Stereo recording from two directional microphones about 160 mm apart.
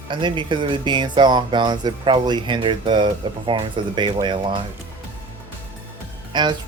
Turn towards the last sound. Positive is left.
turn(degrees=-30)  # may be behind; listen again after turning